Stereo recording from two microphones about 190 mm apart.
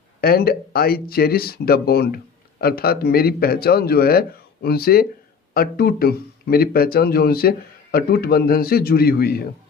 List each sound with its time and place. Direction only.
0.2 s speech: 50° left (ahead or behind)